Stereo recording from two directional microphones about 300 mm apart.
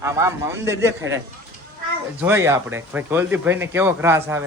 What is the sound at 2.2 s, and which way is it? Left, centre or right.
Speech, centre.